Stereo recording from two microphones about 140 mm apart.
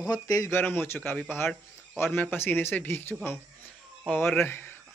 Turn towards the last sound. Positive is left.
turn(degrees=15)  # may be behind; listen again after turning